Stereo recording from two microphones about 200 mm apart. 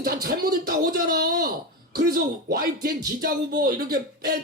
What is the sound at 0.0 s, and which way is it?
Speech, 50° right (ahead or behind).